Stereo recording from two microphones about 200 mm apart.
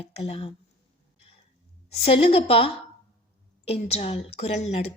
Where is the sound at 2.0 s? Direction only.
30° left (ahead or behind).